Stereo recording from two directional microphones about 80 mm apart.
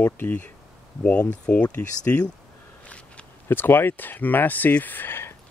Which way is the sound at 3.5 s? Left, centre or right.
Left.